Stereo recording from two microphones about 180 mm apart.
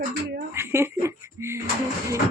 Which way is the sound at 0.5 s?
15° right (ahead or behind).